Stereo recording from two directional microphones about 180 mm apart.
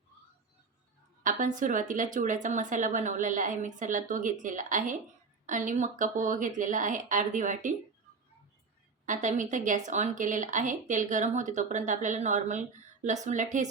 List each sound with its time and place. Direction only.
1.2 s speech: 45° right (ahead or behind)
9.0 s speech: 45° right (ahead or behind)